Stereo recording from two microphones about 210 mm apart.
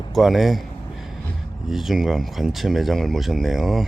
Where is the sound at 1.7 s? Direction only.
Centre (ahead or behind).